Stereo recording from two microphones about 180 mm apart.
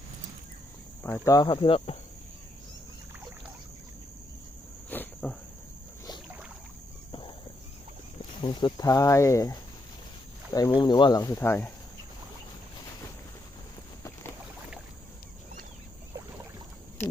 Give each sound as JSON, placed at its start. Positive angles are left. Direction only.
{"t": 1.0, "sound": "speech", "side_deg": 15}
{"t": 4.9, "sound": "cricket", "side_deg": 10}
{"t": 7.1, "sound": "a sound", "side_deg": 30}
{"t": 8.4, "sound": "speech", "side_deg": 25}